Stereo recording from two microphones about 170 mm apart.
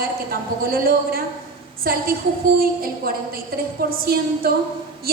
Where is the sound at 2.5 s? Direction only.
60° right (ahead or behind).